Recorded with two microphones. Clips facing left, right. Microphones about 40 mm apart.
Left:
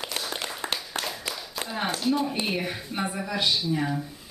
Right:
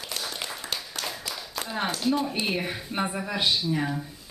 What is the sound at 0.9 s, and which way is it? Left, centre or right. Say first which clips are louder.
Clapping: left 3 dB; left.